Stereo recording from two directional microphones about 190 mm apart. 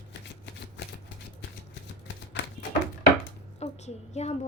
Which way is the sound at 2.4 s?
65° left (ahead or behind).